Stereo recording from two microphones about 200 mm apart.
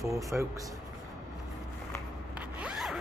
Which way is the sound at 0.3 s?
5° right (ahead or behind).